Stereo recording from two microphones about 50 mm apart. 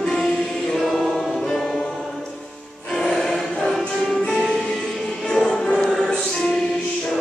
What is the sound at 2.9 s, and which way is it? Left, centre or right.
Music, centre.